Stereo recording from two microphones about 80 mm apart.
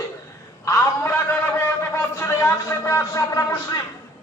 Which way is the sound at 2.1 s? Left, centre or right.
Left.